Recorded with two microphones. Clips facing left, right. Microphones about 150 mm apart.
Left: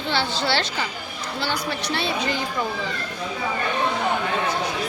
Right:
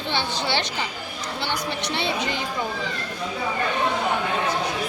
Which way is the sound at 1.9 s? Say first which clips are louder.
Left 1 dB; 20° right (ahead or behind).